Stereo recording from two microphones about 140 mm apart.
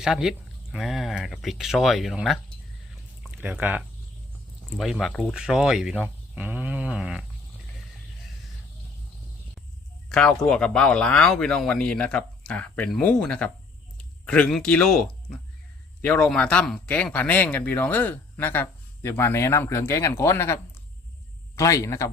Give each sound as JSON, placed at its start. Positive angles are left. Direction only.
{"t": 0.0, "sound": "speech", "side_deg": -5}
{"t": 3.3, "sound": "speech", "side_deg": -10}
{"t": 10.1, "sound": "speech", "side_deg": 5}